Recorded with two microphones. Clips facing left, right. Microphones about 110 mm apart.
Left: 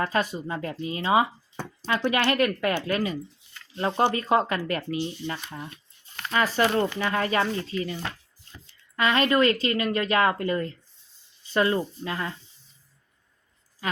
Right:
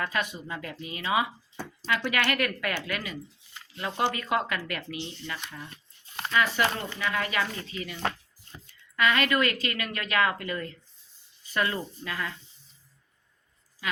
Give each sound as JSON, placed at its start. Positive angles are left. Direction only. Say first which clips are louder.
{"t": 0.0, "sound": "a woman's voice", "louder": "left 5 dB", "side_deg": 35}
{"t": 4.9, "sound": "speech", "louder": "left 8 dB", "side_deg": 15}
{"t": 5.3, "sound": "speech", "louder": "left 4 dB", "side_deg": 30}
{"t": 9.0, "sound": "a woman's voice", "louder": "left 3 dB", "side_deg": 30}
{"t": 13.8, "sound": "a woman's voice", "louder": "left 3 dB", "side_deg": 40}